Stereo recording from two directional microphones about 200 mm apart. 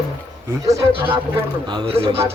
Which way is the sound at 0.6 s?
15° right (ahead or behind).